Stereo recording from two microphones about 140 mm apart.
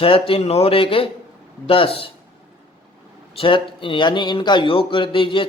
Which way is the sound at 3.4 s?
35° left (ahead or behind).